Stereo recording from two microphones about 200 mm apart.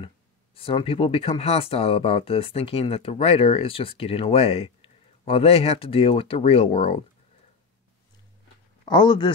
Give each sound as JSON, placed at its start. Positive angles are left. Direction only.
{"t": 0.6, "sound": "speech", "side_deg": 25}
{"t": 8.8, "sound": "speech", "side_deg": 20}